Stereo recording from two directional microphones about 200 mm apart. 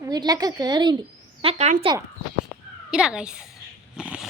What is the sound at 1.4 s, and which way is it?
Speech, 35° right (ahead or behind).